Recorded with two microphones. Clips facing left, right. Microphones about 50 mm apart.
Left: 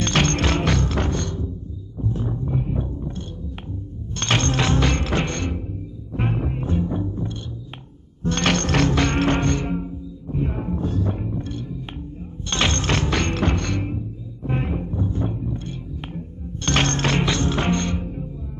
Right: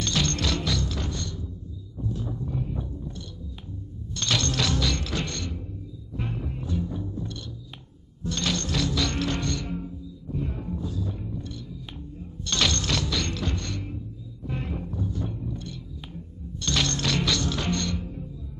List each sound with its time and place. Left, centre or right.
0.0 s music: left
2.0 s roaring cats: left
4.1 s music: left
8.2 s music: left
12.4 s music: left
16.1 s music: left